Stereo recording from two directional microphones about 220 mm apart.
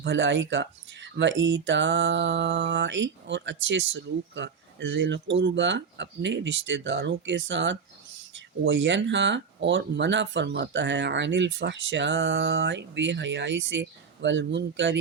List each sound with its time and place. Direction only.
0.0 s speech: 55° right (ahead or behind)